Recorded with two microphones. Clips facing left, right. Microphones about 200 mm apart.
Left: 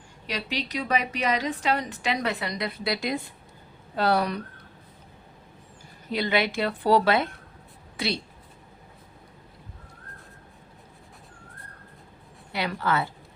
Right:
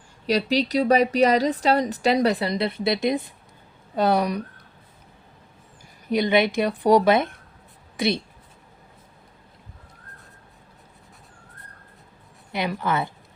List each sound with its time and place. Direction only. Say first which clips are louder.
0.3 s a woman's voice: right 10 dB; 40° right (ahead or behind); by 4.4 s 15° right (ahead or behind)
6.1 s a woman's voice: right 6 dB; 20° right (ahead or behind)
12.5 s a woman's voice: right 2 dB; 20° right (ahead or behind)